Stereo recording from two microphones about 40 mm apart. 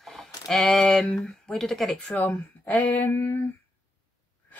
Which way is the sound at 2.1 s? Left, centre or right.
Left.